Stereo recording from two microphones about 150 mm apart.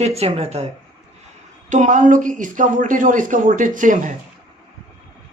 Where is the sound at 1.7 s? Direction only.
55° right (ahead or behind).